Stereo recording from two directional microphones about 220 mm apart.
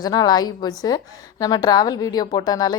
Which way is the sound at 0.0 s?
15° left (ahead or behind).